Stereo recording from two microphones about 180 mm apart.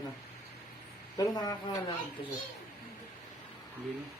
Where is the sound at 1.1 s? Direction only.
20° left (ahead or behind).